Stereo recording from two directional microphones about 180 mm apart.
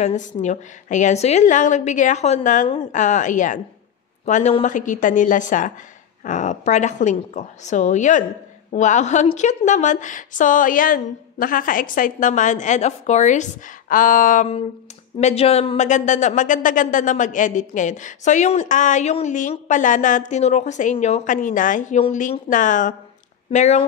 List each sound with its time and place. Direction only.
0.0 s a woman's voice: 45° left (ahead or behind)